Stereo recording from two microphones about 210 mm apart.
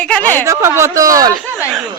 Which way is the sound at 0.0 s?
5° left (ahead or behind).